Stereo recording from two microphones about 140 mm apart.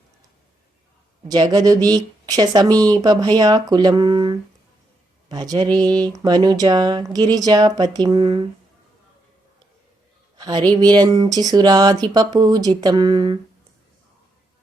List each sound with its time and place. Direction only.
1.3 s speech: 30° right (ahead or behind)
10.3 s a sound: 30° right (ahead or behind)
10.7 s speech: 30° right (ahead or behind)